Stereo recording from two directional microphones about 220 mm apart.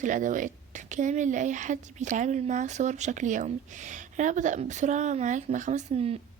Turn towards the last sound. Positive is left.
turn(degrees=-30)  # may be behind; listen again after turning